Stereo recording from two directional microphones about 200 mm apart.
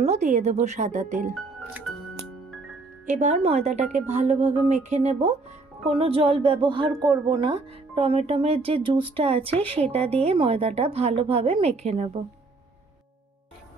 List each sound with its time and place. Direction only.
0.0 s a woman's voice: 35° right (ahead or behind)
3.1 s a woman's voice: 35° right (ahead or behind)